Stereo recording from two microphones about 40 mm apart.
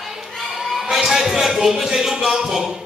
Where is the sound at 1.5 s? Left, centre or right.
Centre.